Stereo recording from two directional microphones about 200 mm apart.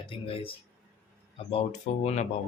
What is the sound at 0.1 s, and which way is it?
Speech, 25° left (ahead or behind).